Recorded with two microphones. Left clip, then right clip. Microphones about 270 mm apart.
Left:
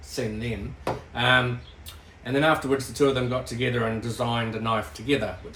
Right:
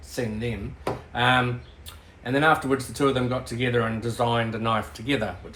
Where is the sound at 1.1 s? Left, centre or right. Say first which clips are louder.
Even; centre.